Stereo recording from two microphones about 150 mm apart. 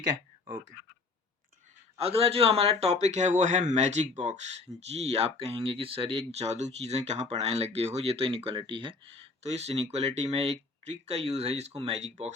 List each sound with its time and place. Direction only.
2.0 s speech: 40° right (ahead or behind)